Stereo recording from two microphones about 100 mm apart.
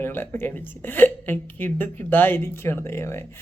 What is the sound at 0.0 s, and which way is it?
Speech, 20° left (ahead or behind).